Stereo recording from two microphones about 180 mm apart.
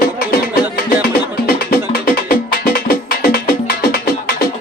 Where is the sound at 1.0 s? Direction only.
55° left (ahead or behind).